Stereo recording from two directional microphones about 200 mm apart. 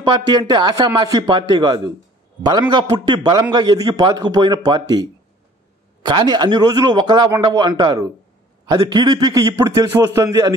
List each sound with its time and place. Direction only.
0.0 s a man's voice: 20° right (ahead or behind)
6.0 s a man's voice: 20° right (ahead or behind)